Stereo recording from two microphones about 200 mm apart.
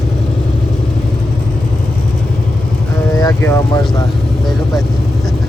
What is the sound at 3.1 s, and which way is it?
Vehicle, 15° left (ahead or behind).